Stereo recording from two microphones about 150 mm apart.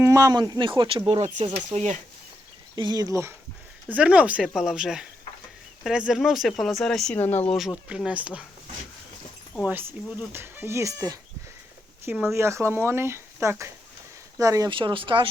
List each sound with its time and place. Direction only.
0.0 s speech: 20° right (ahead or behind); by 2.0 s 45° right (ahead or behind)
2.7 s speech: 30° right (ahead or behind)
3.8 s speech: 10° right (ahead or behind); by 7.4 s 10° left (ahead or behind)
7.9 s speech: 5° right (ahead or behind)
9.6 s speech: 10° right (ahead or behind)
14.7 s speech: 35° right (ahead or behind)